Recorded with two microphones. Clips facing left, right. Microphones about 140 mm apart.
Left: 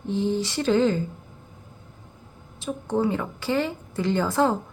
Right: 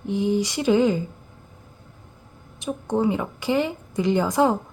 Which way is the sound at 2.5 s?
15° right (ahead or behind).